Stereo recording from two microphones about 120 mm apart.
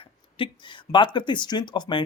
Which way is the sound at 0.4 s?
45° left (ahead or behind).